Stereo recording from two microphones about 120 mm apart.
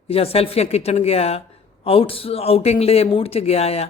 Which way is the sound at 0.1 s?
55° left (ahead or behind).